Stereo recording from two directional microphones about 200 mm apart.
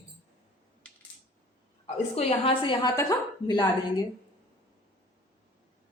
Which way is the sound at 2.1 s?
30° left (ahead or behind).